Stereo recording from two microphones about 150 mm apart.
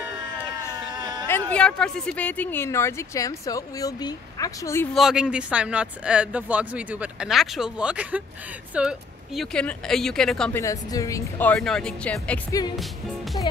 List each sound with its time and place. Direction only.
1.2 s speech: 10° left (ahead or behind)
4.9 s speech: 5° right (ahead or behind)
10.5 s speech: 20° left (ahead or behind)